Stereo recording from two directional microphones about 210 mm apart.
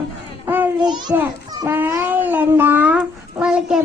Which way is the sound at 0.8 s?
20° right (ahead or behind).